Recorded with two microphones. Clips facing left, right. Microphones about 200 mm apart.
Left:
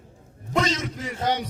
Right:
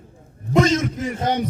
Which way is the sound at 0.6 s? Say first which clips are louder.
Right 10 dB; 45° right (ahead or behind).